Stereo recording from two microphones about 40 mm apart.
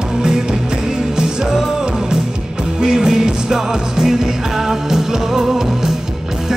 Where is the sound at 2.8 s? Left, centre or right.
Centre.